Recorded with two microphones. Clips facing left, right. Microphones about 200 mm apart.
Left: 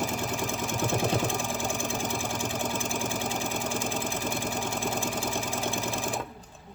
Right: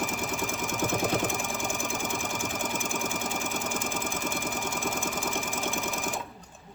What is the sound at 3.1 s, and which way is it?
Sewing machine, 30° left (ahead or behind).